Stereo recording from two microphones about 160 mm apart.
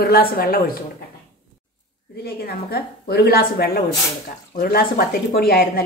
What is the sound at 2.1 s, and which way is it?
A woman's voice, 75° left (ahead or behind).